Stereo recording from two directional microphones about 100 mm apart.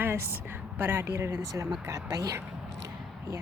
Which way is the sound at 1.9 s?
35° right (ahead or behind).